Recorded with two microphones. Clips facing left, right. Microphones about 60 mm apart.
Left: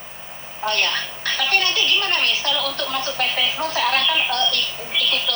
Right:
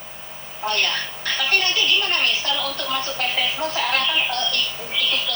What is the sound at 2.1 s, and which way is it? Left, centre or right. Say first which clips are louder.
Speech: left 1 dB; left.